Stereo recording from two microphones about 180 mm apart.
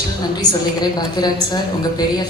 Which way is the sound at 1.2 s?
20° left (ahead or behind).